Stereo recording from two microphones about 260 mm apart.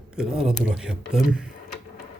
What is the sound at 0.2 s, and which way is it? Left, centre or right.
A man's voice, centre.